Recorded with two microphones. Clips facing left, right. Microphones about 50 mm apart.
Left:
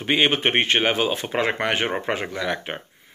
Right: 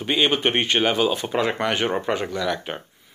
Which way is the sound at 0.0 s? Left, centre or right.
Left.